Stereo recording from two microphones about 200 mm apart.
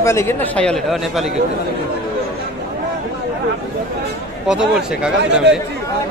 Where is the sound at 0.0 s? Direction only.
15° left (ahead or behind).